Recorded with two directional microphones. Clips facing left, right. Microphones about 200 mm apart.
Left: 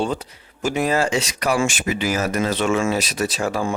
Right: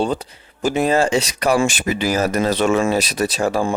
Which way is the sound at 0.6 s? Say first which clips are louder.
Right 3 dB; 30° right (ahead or behind).